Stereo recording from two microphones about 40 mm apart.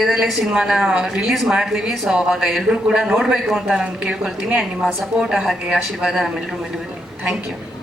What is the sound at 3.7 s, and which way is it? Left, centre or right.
Speech, right.